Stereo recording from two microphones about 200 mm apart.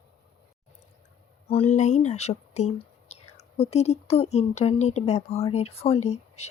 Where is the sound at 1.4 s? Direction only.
30° left (ahead or behind).